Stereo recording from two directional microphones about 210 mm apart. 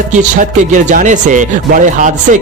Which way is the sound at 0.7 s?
35° right (ahead or behind).